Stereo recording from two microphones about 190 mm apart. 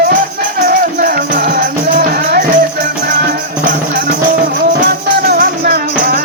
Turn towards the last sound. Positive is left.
turn(degrees=-55)  # may be behind; listen again after turning